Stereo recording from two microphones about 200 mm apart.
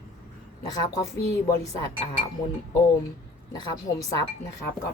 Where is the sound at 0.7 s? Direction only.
20° left (ahead or behind).